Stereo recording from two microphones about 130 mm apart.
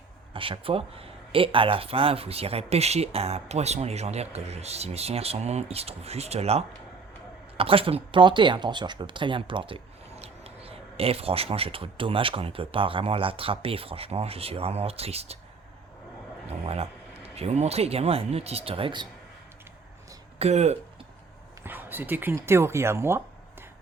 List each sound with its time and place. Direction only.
0.3 s speech: 40° right (ahead or behind)
16.5 s speech: 55° right (ahead or behind)
20.4 s speech: 60° right (ahead or behind)
21.6 s speech: 15° right (ahead or behind)